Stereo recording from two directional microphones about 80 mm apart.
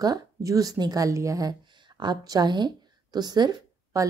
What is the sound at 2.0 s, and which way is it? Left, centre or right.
A woman's voice, right.